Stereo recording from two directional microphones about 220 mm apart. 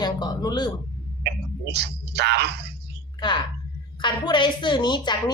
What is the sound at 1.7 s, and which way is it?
Speech, 50° right (ahead or behind).